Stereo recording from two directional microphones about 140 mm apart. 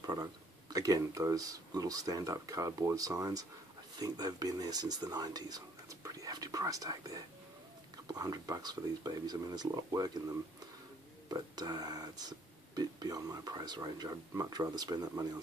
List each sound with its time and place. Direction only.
0.0 s speech: 30° right (ahead or behind)
11.2 s speech: 30° right (ahead or behind)